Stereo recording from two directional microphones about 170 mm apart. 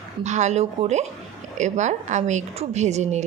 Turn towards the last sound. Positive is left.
turn(degrees=-40)  # may be behind; listen again after turning